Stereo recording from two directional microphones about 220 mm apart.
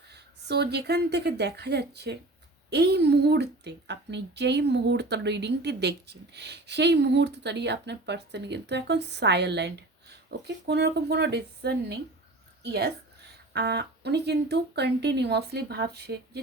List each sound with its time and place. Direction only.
0.1 s a woman's voice: 50° right (ahead or behind)